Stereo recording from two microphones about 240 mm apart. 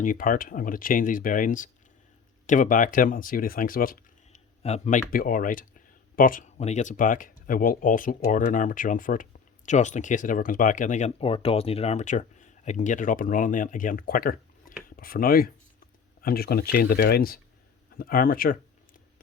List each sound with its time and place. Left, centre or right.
0.0 s speech: left